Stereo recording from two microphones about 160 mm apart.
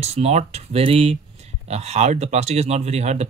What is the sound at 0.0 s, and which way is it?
Speech, 40° right (ahead or behind).